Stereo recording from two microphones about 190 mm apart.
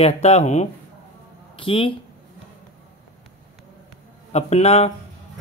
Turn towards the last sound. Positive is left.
turn(degrees=35)  # may be behind; listen again after turning